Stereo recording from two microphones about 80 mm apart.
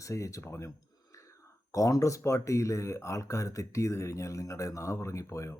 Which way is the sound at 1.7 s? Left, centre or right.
Left.